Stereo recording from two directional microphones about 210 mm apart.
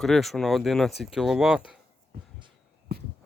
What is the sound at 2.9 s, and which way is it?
Walk, 50° right (ahead or behind).